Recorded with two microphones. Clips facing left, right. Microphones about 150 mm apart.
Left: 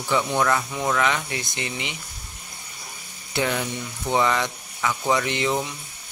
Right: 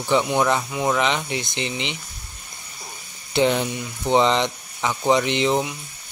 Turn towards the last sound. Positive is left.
turn(degrees=-20)  # may be behind; listen again after turning